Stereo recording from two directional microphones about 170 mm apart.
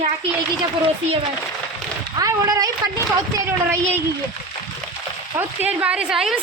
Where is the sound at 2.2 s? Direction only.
20° right (ahead or behind).